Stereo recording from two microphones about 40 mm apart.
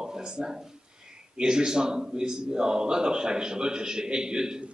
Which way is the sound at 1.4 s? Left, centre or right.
Centre.